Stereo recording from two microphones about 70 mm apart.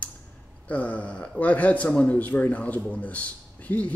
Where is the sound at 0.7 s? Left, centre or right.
Left.